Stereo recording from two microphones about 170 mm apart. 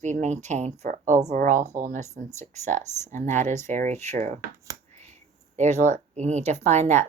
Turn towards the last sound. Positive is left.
turn(degrees=-40)  # may be behind; listen again after turning